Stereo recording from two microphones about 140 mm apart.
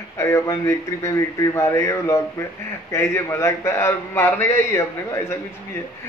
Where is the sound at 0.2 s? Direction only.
20° left (ahead or behind).